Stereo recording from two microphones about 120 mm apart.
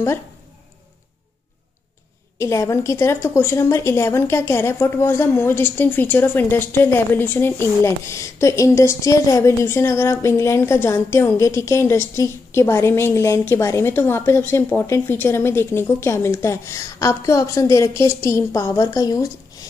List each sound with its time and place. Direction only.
2.3 s a woman's voice: 25° left (ahead or behind)